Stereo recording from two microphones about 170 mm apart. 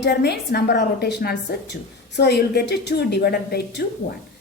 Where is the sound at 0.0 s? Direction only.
75° left (ahead or behind).